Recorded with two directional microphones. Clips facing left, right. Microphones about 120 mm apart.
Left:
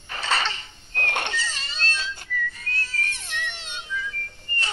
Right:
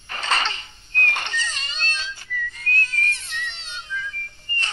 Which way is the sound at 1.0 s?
55° left (ahead or behind).